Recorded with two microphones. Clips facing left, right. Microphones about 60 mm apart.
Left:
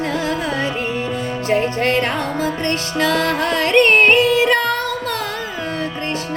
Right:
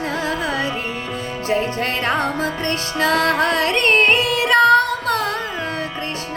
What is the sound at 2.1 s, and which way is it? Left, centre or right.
Music, right.